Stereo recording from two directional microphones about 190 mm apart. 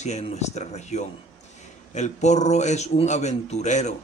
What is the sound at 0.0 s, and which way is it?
Speech, 35° left (ahead or behind).